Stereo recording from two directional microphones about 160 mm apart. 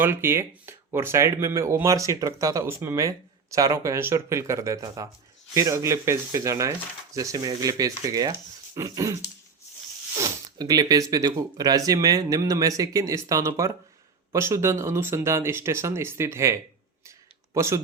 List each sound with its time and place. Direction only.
0.0 s speech: 15° right (ahead or behind)
10.2 s a sound: 20° right (ahead or behind)
11.1 s speech: 25° right (ahead or behind)